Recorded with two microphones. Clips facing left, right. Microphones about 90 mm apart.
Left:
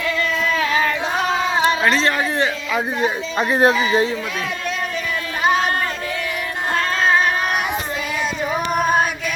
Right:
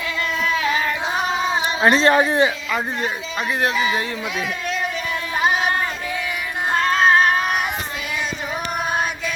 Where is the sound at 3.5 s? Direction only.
35° left (ahead or behind).